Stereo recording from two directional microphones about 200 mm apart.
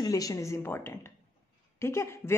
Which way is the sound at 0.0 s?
15° left (ahead or behind).